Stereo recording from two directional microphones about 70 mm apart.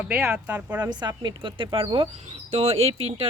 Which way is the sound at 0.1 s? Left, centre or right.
Centre.